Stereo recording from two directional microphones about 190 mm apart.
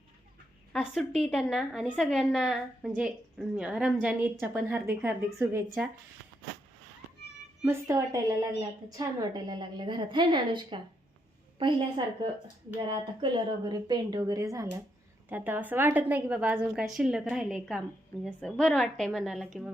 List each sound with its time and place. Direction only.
0.7 s a woman's voice: centre (ahead or behind)
7.6 s a woman's voice: 15° right (ahead or behind)